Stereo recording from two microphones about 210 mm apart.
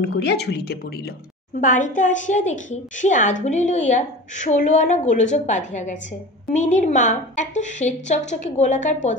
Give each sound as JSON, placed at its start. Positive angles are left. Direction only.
{"t": 0.0, "sound": "a woman's voice", "side_deg": 50}
{"t": 1.6, "sound": "a woman's voice", "side_deg": 40}